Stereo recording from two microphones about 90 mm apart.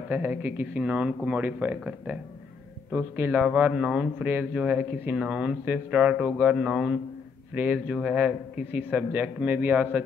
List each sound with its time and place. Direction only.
0.1 s speech: 20° right (ahead or behind)
7.5 s speech: 20° right (ahead or behind)